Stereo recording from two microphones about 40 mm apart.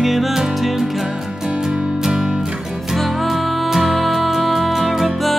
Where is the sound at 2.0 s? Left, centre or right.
Centre.